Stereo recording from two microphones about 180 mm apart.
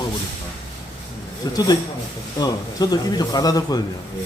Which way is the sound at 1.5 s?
20° left (ahead or behind).